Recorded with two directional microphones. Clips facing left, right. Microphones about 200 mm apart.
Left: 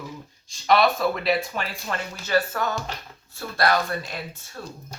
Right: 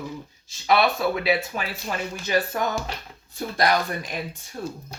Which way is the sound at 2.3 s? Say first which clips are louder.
Even; 15° right (ahead or behind).